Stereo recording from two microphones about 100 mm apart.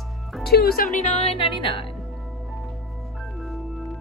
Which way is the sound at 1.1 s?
90° left.